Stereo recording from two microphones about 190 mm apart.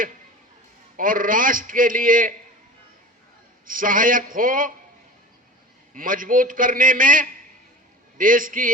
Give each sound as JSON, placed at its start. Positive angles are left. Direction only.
{"t": 0.9, "sound": "a man's voice", "side_deg": -45}
{"t": 3.7, "sound": "a man's voice", "side_deg": -45}
{"t": 5.9, "sound": "a man's voice", "side_deg": -45}